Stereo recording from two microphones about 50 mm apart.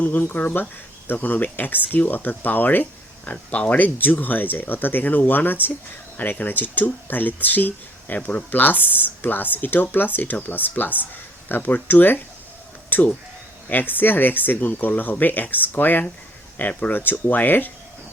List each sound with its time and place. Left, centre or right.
0.0 s speech: left
3.2 s speech: left